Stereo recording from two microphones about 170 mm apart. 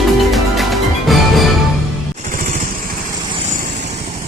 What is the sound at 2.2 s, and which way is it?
Vehicle, 50° right (ahead or behind).